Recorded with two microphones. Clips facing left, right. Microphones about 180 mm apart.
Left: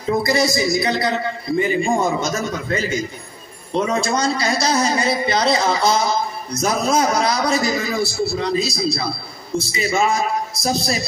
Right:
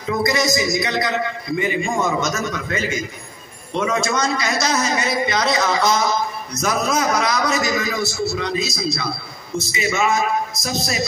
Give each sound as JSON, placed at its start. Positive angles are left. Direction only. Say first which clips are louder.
{"t": 0.0, "sound": "a man's voice", "louder": "left 2 dB", "side_deg": 30}